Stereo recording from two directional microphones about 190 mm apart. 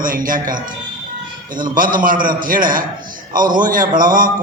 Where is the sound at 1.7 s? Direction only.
45° right (ahead or behind).